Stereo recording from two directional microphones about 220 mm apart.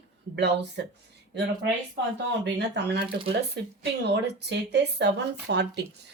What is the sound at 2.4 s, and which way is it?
Speech, 50° right (ahead or behind).